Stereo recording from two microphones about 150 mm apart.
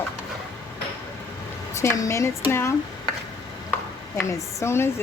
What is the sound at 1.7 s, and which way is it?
Speech, 20° left (ahead or behind).